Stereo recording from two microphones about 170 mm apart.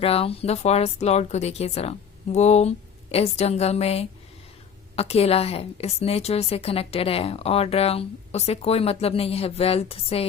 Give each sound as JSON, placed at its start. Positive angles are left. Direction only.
{"t": 0.0, "sound": "a woman's voice", "side_deg": 35}